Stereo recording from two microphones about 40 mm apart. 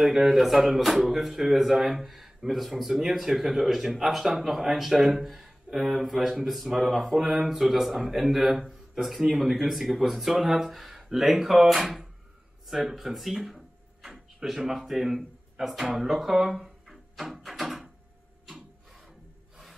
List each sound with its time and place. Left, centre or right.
0.0 s speech: centre
15.9 s drawer open or close: centre